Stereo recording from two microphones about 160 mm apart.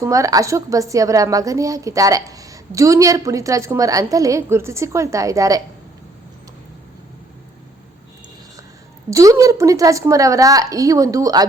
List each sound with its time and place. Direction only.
0.0 s a woman's voice: 20° right (ahead or behind)
9.0 s a woman's voice: 20° right (ahead or behind)